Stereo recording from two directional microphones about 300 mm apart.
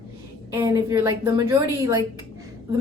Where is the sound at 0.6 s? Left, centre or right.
Centre.